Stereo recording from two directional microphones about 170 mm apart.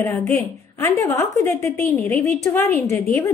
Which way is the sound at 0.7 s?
15° left (ahead or behind).